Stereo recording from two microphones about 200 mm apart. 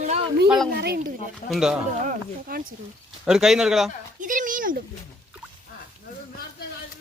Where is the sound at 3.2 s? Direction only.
Centre (ahead or behind).